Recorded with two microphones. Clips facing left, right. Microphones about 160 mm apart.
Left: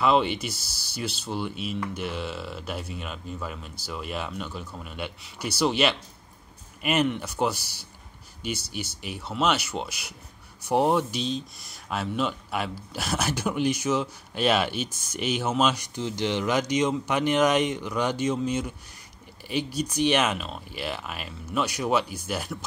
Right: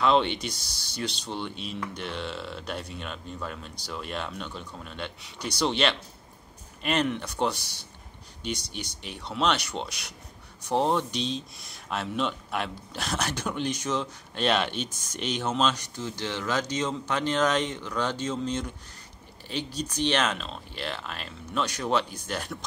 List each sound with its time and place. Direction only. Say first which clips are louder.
0.0 s speech: left 1 dB; 5° left (ahead or behind)